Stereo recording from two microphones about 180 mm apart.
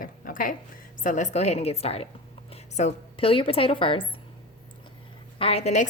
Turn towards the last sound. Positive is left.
turn(degrees=40)  # may be behind; listen again after turning